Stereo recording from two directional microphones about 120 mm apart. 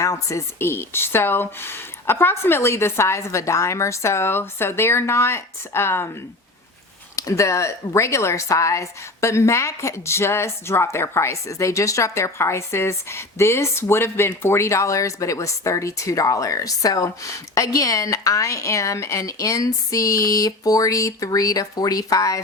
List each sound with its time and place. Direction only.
0.0 s speech: 25° left (ahead or behind)
7.2 s speech: 25° left (ahead or behind)